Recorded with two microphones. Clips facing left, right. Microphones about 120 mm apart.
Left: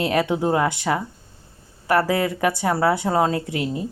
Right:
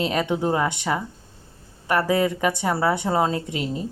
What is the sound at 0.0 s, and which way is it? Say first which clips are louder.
Speech: left 2 dB; 5° left (ahead or behind).